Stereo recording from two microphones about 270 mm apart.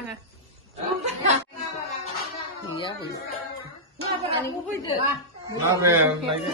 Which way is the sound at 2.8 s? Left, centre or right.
Centre.